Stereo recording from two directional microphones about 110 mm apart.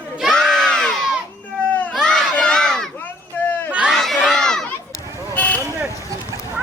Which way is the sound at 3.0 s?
15° left (ahead or behind).